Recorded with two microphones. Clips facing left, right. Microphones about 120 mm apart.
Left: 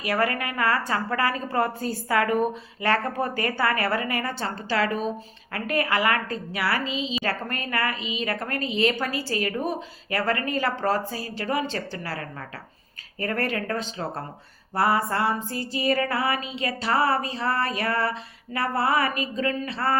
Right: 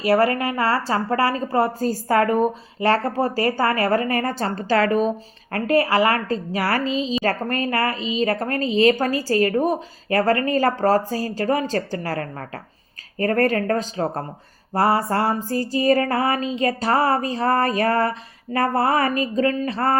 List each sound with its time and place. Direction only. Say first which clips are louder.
0.0 s a woman's voice: right 7 dB; 30° right (ahead or behind)
1.9 s a woman's voice: right 5 dB; 40° right (ahead or behind)
5.6 s a woman's voice: right 6 dB; 30° right (ahead or behind)
13.1 s a sound: right 8 dB; 45° right (ahead or behind)
14.7 s a woman's voice: right 4 dB; 40° right (ahead or behind)
18.5 s a sound: right 4 dB; 45° right (ahead or behind)